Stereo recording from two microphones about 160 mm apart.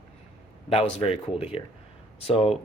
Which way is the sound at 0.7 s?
40° left (ahead or behind).